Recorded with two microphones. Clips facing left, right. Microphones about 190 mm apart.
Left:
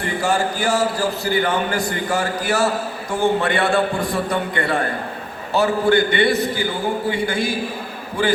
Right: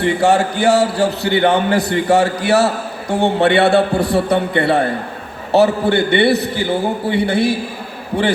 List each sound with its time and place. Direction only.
0.0 s a man's voice: 70° right (ahead or behind)